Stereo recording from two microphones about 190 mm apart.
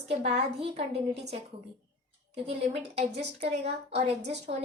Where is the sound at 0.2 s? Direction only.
35° right (ahead or behind).